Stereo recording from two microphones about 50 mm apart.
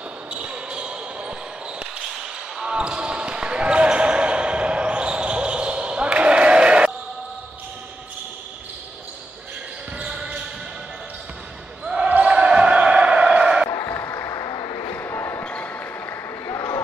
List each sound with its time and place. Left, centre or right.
0.3 s basketball bounce: right
2.6 s basketball bounce: centre
10.0 s basketball bounce: centre
11.8 s basketball bounce: centre
13.8 s a sound: left
15.0 s basketball bounce: left
15.4 s basketball bounce: left
16.4 s a sound: left